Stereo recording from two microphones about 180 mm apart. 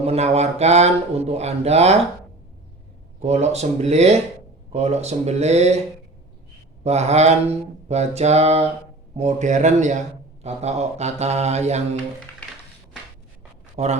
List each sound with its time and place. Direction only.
0.0 s speech: 35° right (ahead or behind)
3.2 s speech: 40° right (ahead or behind)
6.8 s speech: 35° right (ahead or behind)
13.8 s speech: 35° right (ahead or behind)